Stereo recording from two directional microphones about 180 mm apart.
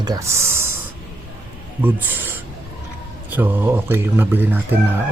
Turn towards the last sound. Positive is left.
turn(degrees=-10)  # may be behind; listen again after turning